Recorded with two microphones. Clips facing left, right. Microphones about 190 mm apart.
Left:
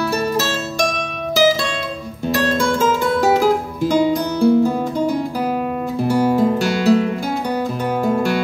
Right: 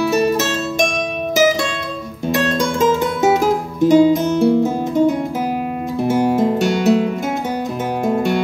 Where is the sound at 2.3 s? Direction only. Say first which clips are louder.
Even; 20° right (ahead or behind).